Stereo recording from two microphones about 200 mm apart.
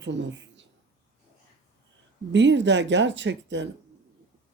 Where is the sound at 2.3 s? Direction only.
65° right (ahead or behind).